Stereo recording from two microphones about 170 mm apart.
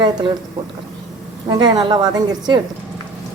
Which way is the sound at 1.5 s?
25° right (ahead or behind).